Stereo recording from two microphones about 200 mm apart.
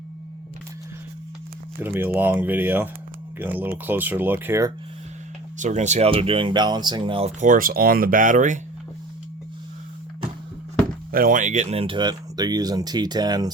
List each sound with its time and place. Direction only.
1.8 s speech: 10° right (ahead or behind)
5.5 s speech: 35° right (ahead or behind)
11.1 s speech: 45° right (ahead or behind); by 13.5 s 20° right (ahead or behind)